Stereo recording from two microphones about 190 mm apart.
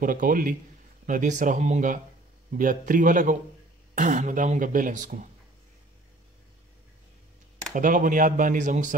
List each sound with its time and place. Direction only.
0.0 s speech: 45° right (ahead or behind)
7.7 s speech: 45° right (ahead or behind)